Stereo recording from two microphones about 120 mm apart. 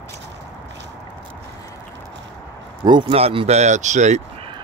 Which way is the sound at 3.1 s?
55° right (ahead or behind).